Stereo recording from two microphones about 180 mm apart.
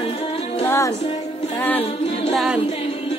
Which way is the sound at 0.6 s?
15° left (ahead or behind).